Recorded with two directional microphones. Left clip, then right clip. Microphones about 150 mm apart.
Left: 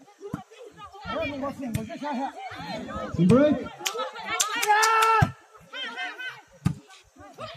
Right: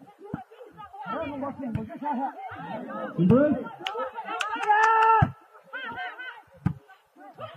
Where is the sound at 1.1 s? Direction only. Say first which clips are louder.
Left 3 dB; 35° left (ahead or behind).